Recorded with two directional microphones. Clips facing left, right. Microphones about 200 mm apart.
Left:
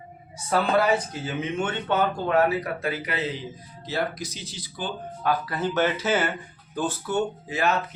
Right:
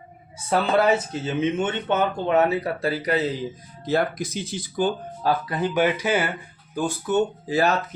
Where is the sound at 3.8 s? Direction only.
50° right (ahead or behind).